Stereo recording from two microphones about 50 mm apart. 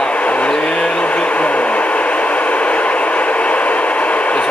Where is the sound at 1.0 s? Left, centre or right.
Left.